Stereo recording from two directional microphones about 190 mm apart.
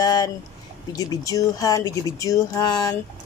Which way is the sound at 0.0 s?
20° left (ahead or behind).